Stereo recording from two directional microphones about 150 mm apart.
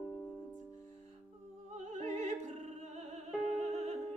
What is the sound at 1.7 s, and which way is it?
Opera, 50° right (ahead or behind).